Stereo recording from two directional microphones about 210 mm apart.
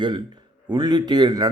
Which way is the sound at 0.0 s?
20° right (ahead or behind).